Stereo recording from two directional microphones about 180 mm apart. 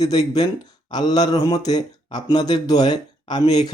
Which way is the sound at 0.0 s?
20° left (ahead or behind).